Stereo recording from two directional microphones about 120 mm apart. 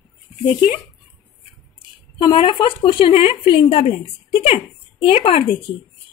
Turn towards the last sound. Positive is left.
turn(degrees=50)  # may be behind; listen again after turning